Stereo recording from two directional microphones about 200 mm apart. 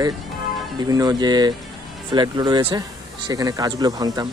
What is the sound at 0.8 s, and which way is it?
Speech, 20° right (ahead or behind).